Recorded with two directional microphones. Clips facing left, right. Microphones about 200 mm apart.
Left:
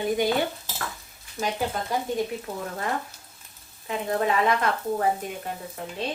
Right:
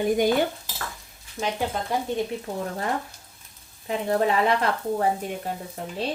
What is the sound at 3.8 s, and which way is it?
Speech, 35° right (ahead or behind).